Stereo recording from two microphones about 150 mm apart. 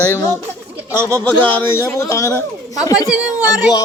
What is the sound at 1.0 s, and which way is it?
Speech, 20° right (ahead or behind).